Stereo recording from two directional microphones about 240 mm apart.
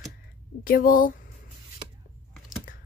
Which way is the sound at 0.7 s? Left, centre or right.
Left.